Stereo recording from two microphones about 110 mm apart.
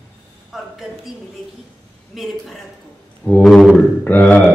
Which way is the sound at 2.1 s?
Centre (ahead or behind).